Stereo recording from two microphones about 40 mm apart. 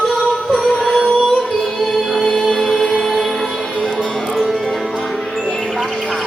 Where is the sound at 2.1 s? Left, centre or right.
Centre.